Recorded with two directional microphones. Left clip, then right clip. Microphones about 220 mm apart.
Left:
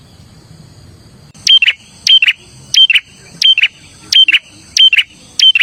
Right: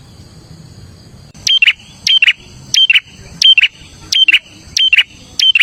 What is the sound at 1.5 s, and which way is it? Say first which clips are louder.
Cricket: left 2 dB; 15° right (ahead or behind).